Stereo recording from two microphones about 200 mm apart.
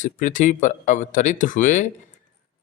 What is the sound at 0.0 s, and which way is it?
Speech, 40° left (ahead or behind).